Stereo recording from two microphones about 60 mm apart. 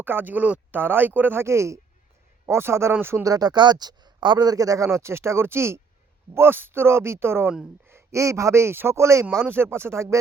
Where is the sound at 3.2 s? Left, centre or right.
Right.